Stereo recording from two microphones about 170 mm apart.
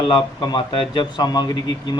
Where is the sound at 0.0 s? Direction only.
30° left (ahead or behind).